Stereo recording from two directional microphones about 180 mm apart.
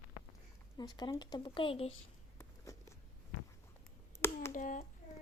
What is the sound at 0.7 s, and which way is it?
Speech, 25° left (ahead or behind).